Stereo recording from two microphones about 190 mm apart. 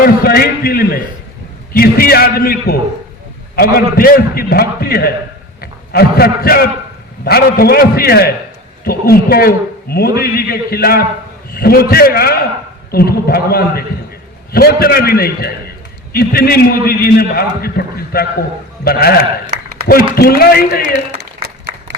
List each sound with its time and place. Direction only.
0.0 s a man's voice: 50° left (ahead or behind)
21.2 s applause: 60° right (ahead or behind)